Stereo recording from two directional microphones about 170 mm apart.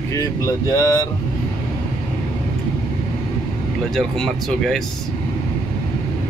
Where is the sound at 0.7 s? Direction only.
20° left (ahead or behind).